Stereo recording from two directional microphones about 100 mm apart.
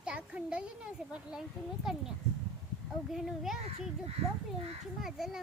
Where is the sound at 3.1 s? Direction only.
5° right (ahead or behind).